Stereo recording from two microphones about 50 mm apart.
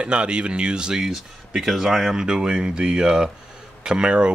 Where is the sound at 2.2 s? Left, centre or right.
Centre.